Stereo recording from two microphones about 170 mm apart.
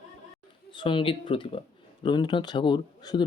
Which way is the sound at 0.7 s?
30° left (ahead or behind).